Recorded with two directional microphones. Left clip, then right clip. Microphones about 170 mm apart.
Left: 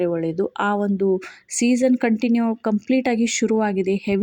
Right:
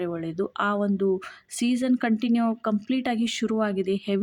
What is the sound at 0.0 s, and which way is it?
A woman's voice, 15° left (ahead or behind).